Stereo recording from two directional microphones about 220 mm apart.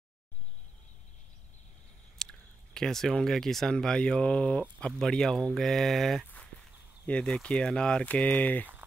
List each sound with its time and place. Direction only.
2.1 s speech: 5° left (ahead or behind)